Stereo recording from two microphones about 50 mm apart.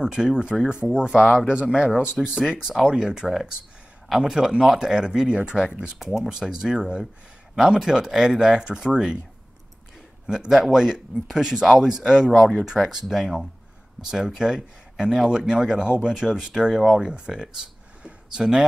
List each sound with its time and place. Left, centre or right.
0.0 s speech: centre
10.2 s speech: centre
12.3 s speech: centre
12.6 s speech: centre